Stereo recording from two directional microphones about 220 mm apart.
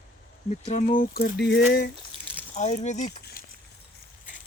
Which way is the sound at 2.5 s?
35° left (ahead or behind).